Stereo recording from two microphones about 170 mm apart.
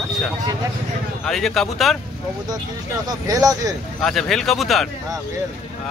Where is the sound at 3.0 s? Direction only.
20° right (ahead or behind).